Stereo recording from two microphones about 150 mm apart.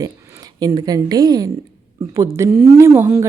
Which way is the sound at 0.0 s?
25° right (ahead or behind).